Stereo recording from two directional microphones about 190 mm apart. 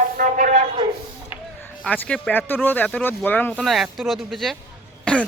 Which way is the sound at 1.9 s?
5° left (ahead or behind).